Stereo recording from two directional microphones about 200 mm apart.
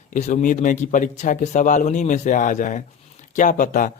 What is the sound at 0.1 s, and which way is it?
Speech, 35° left (ahead or behind).